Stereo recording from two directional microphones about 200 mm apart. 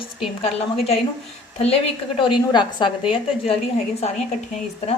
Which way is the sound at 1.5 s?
30° left (ahead or behind).